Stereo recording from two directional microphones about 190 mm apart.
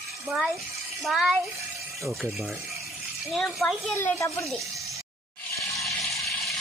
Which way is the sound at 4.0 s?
15° left (ahead or behind).